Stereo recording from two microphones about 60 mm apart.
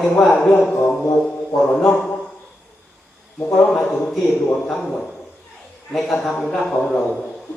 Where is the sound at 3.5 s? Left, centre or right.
Centre.